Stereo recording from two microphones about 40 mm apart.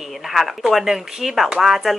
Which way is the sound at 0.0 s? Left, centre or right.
Centre.